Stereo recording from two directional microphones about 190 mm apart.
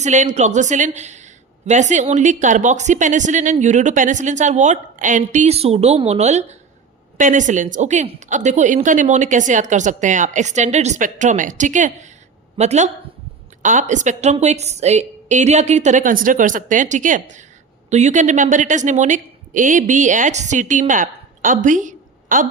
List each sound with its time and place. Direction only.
0.0 s a woman's voice: 40° right (ahead or behind)